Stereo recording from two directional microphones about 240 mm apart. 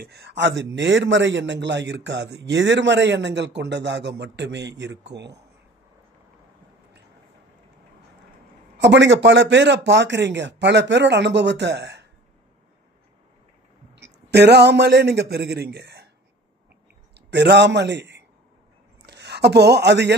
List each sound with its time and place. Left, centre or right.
0.0 s a man's voice: right
8.7 s a man's voice: right
13.9 s speech: right
17.3 s a man's voice: right